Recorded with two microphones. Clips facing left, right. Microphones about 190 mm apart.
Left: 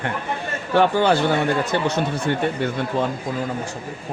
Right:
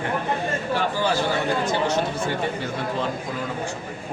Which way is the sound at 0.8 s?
60° left (ahead or behind).